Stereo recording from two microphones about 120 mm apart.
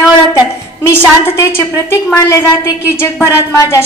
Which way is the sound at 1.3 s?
20° left (ahead or behind).